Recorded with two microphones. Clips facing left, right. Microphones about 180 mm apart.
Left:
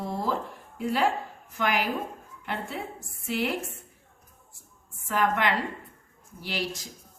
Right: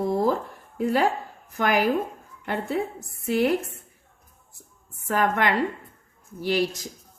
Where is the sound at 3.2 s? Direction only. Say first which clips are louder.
Right 7 dB; 45° right (ahead or behind).